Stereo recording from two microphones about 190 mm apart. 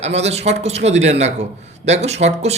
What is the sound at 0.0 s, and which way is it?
A man's voice, 35° right (ahead or behind).